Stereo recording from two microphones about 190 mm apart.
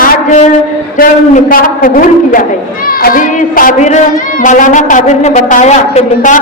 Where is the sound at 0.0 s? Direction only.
45° left (ahead or behind).